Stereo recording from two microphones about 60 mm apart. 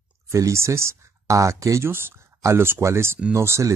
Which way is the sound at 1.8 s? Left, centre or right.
Right.